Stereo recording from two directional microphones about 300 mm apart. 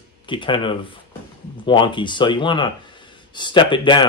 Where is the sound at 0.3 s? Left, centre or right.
Centre.